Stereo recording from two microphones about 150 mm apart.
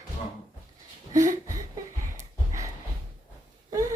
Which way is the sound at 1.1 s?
20° right (ahead or behind).